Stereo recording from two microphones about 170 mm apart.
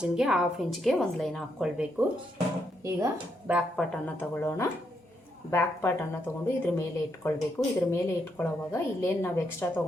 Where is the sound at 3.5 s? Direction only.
Centre (ahead or behind).